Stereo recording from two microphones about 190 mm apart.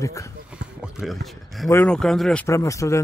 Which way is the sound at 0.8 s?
5° right (ahead or behind).